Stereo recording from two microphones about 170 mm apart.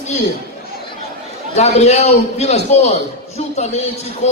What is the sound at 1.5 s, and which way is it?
A man's voice, 40° left (ahead or behind).